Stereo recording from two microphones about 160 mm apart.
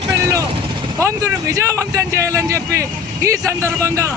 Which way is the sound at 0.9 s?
20° right (ahead or behind).